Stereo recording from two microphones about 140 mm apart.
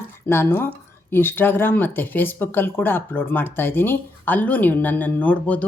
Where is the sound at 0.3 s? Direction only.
15° left (ahead or behind).